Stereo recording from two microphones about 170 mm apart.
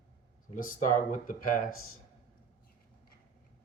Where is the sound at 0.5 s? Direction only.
50° left (ahead or behind).